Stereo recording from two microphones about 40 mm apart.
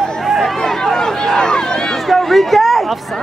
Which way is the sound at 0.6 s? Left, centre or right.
Centre.